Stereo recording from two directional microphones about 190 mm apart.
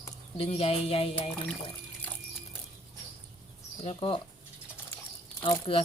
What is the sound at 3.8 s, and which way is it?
Speech, 25° left (ahead or behind).